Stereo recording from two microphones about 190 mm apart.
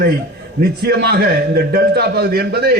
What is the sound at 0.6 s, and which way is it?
A man's voice, 55° right (ahead or behind).